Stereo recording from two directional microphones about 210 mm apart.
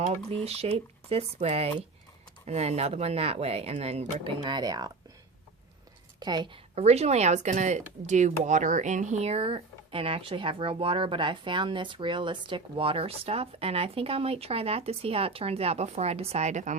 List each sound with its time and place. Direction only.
0.4 s speech: 30° right (ahead or behind)
6.1 s a woman's voice: 20° right (ahead or behind)
6.7 s speech: 30° right (ahead or behind)